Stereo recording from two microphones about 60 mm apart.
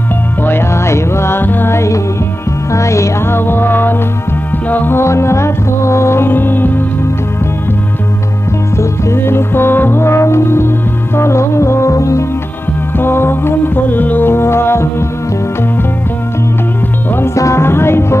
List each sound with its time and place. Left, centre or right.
0.4 s music: left
2.7 s music: left
3.3 s music: left
4.9 s music: left
8.7 s music: left
12.9 s music: left
17.6 s music: left